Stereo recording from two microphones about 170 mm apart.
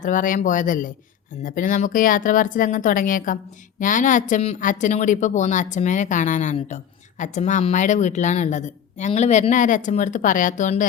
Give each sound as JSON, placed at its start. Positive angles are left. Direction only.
{"t": 0.0, "sound": "speech", "side_deg": 50}